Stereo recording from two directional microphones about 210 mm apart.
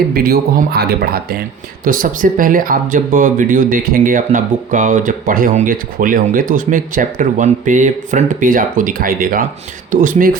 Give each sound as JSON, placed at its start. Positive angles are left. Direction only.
{"t": 0.1, "sound": "speech", "side_deg": -45}